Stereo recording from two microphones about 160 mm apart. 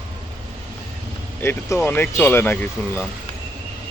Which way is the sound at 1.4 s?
15° left (ahead or behind).